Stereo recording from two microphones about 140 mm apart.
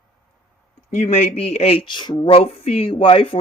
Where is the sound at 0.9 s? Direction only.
55° left (ahead or behind).